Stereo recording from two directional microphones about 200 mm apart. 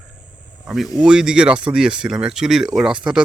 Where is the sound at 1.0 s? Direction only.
5° right (ahead or behind).